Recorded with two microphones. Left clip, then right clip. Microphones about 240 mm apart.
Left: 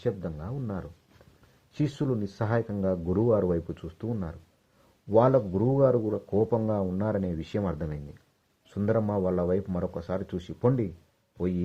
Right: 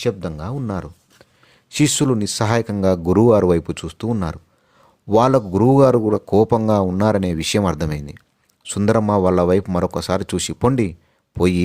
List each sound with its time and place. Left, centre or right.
0.0 s speech: right